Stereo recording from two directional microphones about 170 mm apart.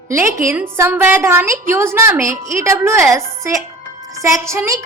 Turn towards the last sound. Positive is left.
turn(degrees=-15)  # may be behind; listen again after turning